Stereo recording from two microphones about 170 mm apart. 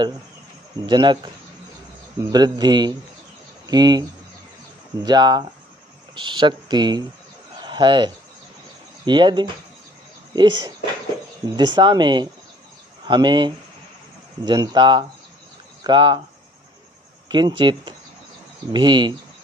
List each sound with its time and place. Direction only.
0.9 s speech: 25° right (ahead or behind)
2.3 s speech: 25° right (ahead or behind)
5.0 s speech: 25° right (ahead or behind)
17.2 s speech: 25° right (ahead or behind)